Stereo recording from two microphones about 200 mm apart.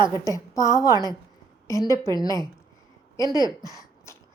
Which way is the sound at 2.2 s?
20° right (ahead or behind).